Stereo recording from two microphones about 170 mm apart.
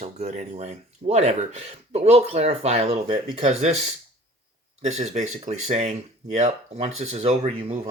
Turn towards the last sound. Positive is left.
turn(degrees=-40)  # may be behind; listen again after turning